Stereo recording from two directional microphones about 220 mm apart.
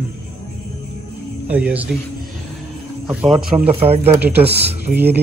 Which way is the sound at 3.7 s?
25° right (ahead or behind).